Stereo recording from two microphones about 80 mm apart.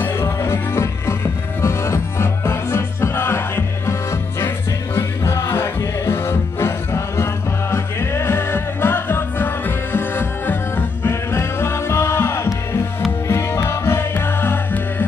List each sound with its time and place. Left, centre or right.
0.0 s music: left
4.9 s music: left